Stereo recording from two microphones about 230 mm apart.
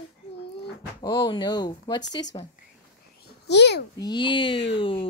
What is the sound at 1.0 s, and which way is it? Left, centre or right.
Speech, centre.